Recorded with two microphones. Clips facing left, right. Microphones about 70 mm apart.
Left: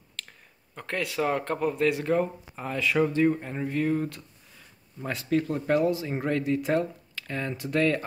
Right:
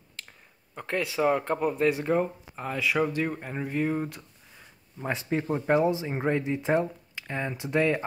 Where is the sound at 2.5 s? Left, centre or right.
Centre.